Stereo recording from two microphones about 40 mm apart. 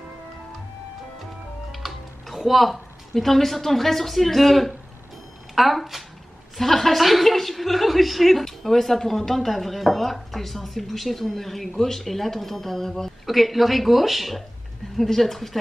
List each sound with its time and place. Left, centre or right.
1.7 s a woman's voice: centre